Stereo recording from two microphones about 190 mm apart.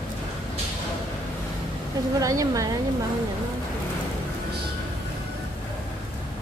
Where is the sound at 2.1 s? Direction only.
15° right (ahead or behind).